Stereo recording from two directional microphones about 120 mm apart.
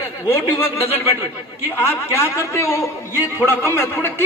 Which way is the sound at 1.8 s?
20° left (ahead or behind).